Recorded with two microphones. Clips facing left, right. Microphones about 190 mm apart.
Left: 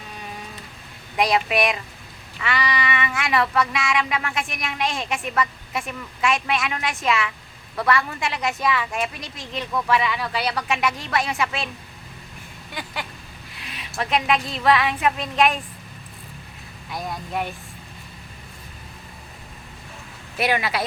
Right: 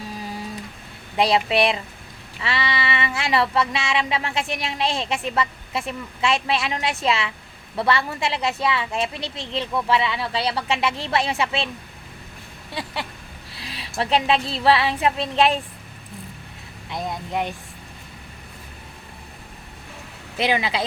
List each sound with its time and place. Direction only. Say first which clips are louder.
1.1 s speech: right 1 dB; 30° right (ahead or behind)
12.7 s a sound: right 3 dB; 30° right (ahead or behind)
14.0 s speech: right 2 dB; 30° right (ahead or behind)
16.9 s speech: right 2 dB; 20° right (ahead or behind)
20.4 s speech: right 1 dB; 20° right (ahead or behind)